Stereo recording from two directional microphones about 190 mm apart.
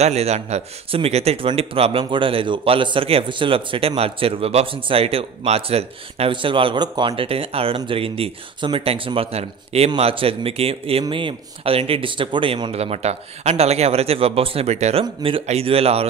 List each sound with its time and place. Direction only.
0.0 s speech: 35° right (ahead or behind)